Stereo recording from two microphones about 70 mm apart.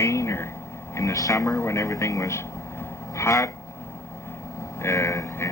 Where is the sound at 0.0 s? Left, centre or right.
Left.